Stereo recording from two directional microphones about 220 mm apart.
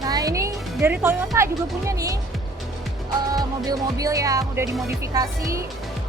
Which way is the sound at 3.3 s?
15° right (ahead or behind).